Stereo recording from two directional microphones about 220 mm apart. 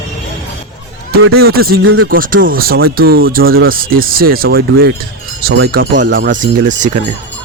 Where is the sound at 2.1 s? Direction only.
40° right (ahead or behind).